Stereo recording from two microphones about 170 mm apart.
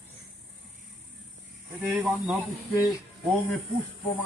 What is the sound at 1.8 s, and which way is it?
Speech, 5° right (ahead or behind).